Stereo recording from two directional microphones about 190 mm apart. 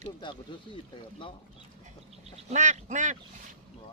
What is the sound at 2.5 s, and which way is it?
Duck, 40° right (ahead or behind).